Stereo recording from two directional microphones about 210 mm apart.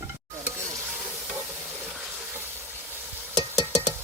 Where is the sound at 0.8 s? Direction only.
Centre (ahead or behind).